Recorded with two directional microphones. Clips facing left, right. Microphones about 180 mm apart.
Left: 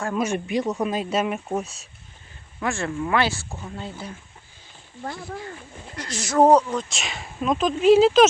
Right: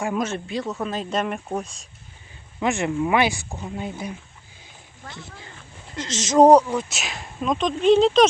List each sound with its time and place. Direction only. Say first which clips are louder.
0.2 s speech: left 2 dB; 15° left (ahead or behind)
2.6 s speech: right 4 dB; 20° right (ahead or behind)
6.0 s speech: right 3 dB; 20° right (ahead or behind); by 8.3 s 5° left (ahead or behind)